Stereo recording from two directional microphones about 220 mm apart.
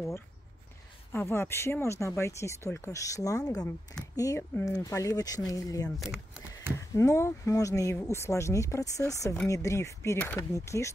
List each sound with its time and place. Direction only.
1.1 s speech: 10° left (ahead or behind)
5.9 s a sound: centre (ahead or behind)
7.0 s speech: 15° left (ahead or behind)